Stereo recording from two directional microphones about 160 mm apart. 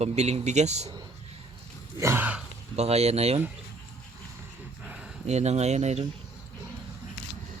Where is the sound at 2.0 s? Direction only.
15° right (ahead or behind).